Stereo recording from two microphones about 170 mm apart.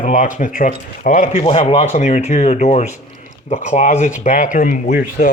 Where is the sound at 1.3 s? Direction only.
35° left (ahead or behind); by 5.2 s 60° left (ahead or behind).